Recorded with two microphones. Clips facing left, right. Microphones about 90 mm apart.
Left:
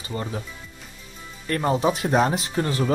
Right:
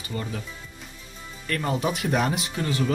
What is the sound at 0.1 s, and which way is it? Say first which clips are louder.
Speech: left 2 dB; 30° left (ahead or behind).